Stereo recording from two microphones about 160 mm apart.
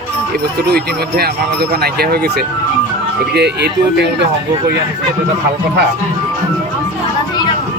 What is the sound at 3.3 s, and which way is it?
Speech, 90° right.